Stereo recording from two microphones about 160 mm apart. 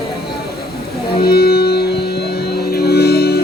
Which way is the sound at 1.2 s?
80° left.